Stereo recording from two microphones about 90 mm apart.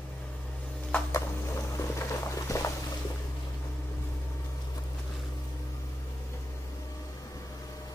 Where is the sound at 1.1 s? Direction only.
35° left (ahead or behind).